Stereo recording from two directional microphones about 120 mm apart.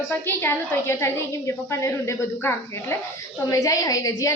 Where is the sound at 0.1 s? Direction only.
15° left (ahead or behind).